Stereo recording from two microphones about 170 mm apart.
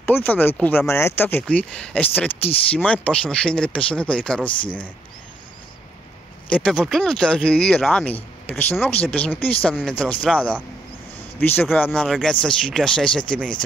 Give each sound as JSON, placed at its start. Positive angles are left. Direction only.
{"t": 0.0, "sound": "speech", "side_deg": 10}
{"t": 4.5, "sound": "speech", "side_deg": 30}
{"t": 6.7, "sound": "speech", "side_deg": 0}
{"t": 11.7, "sound": "speech", "side_deg": 10}